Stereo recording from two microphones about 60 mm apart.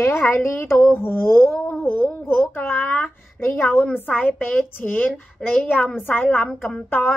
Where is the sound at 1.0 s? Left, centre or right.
Left.